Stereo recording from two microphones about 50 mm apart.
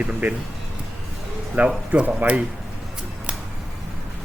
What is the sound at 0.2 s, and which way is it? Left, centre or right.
Speech, right.